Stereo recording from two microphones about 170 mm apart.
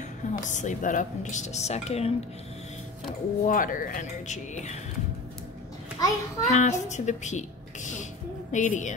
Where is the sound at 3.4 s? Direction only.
50° left (ahead or behind).